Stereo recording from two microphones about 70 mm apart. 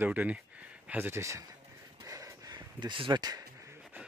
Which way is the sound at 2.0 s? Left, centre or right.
Right.